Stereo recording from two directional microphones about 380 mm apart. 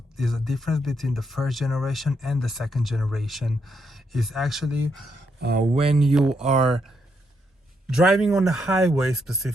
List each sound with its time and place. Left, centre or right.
0.2 s speech: centre
5.4 s speech: right
6.0 s speech: centre